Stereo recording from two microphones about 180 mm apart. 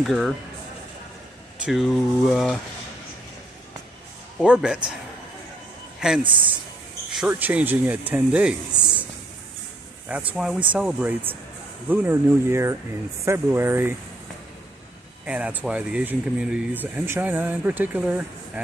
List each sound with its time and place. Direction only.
0.0 s speech: centre (ahead or behind)
1.6 s speech: centre (ahead or behind)
4.5 s speech: 5° right (ahead or behind)
5.9 s speech: 5° right (ahead or behind)
6.2 s speech: 25° right (ahead or behind)
7.1 s speech: 5° right (ahead or behind)
10.0 s speech: 10° right (ahead or behind)
15.2 s speech: 10° right (ahead or behind)